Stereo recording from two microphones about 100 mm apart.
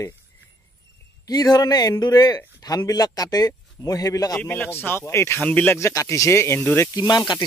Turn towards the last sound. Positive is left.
turn(degrees=45)  # may be behind; listen again after turning